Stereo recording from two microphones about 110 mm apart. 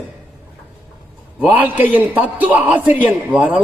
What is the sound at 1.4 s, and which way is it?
A man's voice, 15° right (ahead or behind).